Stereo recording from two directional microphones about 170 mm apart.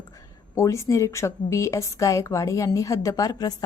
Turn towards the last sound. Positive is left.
turn(degrees=20)  # may be behind; listen again after turning